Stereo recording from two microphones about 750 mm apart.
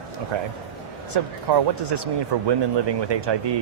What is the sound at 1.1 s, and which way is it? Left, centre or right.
Speech, right.